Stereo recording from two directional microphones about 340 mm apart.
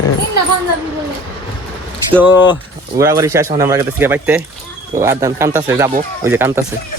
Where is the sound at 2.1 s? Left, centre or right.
Centre.